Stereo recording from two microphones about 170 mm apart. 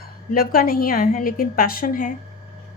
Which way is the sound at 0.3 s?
60° left (ahead or behind).